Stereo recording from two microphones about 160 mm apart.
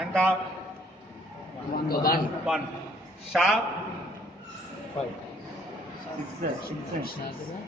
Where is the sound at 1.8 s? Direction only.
70° left (ahead or behind).